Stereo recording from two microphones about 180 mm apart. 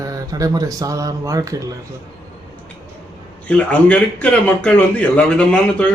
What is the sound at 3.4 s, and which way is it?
A man's voice, 5° left (ahead or behind).